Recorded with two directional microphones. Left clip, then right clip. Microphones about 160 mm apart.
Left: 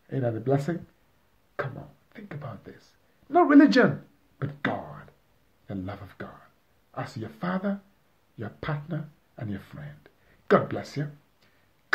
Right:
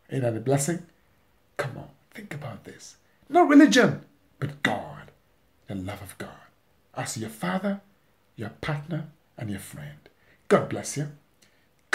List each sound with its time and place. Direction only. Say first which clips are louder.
0.0 s speech: right 2 dB; 20° right (ahead or behind)
4.4 s a sound: right 3 dB; 15° right (ahead or behind)
5.7 s speech: right 1 dB; 15° right (ahead or behind)